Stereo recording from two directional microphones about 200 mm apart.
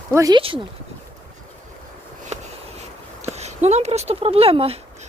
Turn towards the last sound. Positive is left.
turn(degrees=-30)  # may be behind; listen again after turning